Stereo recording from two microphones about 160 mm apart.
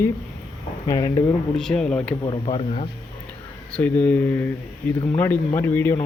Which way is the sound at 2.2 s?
30° left (ahead or behind).